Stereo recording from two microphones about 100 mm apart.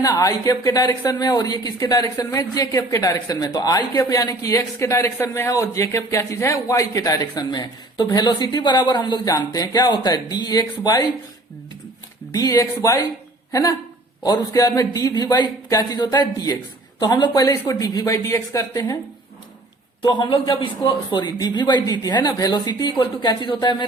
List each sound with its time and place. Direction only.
0.0 s a man's voice: 35° left (ahead or behind)
12.3 s a man's voice: 35° left (ahead or behind)
20.1 s a woman's voice: 45° left (ahead or behind)